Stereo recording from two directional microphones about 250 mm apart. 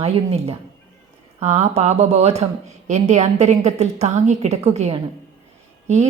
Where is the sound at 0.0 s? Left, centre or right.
Right.